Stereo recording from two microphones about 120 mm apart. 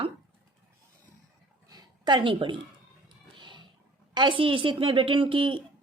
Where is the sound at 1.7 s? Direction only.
40° right (ahead or behind).